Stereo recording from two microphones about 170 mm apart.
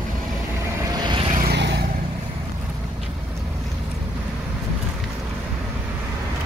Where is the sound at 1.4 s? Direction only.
80° right.